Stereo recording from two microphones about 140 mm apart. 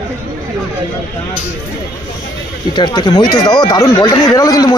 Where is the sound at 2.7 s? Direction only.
30° left (ahead or behind).